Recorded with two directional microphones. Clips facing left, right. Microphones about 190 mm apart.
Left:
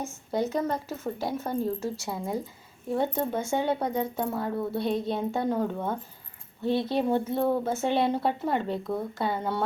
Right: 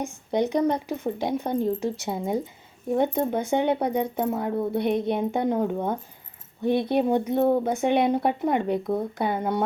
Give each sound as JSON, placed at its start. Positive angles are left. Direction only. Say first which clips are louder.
{"t": 0.0, "sound": "speech", "louder": "right 4 dB", "side_deg": -15}